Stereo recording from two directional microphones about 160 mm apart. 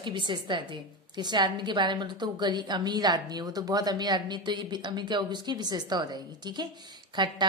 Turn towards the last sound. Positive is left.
turn(degrees=-25)  # may be behind; listen again after turning